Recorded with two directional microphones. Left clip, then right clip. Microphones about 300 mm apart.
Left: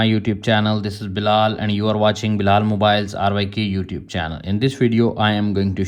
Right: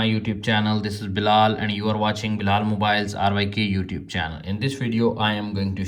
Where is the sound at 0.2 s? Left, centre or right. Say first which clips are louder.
Left 5 dB; centre.